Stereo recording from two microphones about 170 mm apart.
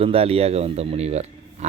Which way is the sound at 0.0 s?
35° right (ahead or behind).